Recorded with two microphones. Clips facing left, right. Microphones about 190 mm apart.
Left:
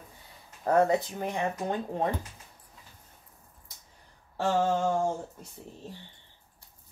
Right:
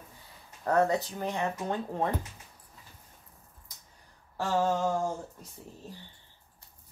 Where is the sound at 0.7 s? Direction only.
25° left (ahead or behind).